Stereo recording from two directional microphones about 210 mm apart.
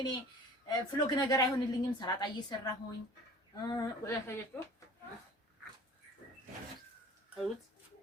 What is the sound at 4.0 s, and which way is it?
Speech, 15° left (ahead or behind).